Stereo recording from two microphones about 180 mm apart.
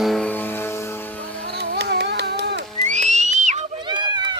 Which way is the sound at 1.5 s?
65° right (ahead or behind).